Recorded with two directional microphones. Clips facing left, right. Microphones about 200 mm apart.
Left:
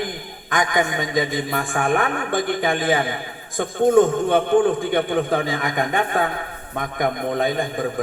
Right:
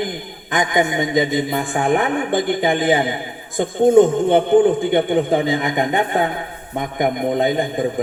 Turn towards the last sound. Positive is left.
turn(degrees=-20)  # may be behind; listen again after turning